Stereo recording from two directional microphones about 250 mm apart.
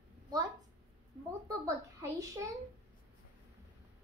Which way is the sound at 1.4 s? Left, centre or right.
Centre.